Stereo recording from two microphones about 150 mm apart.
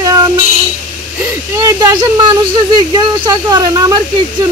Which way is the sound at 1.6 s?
25° right (ahead or behind).